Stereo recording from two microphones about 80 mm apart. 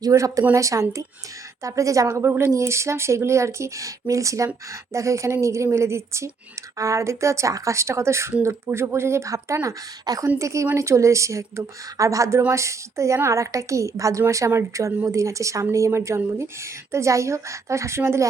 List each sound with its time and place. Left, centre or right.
0.0 s a woman's voice: right